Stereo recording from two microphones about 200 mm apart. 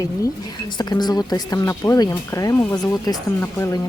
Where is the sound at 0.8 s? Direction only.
20° left (ahead or behind).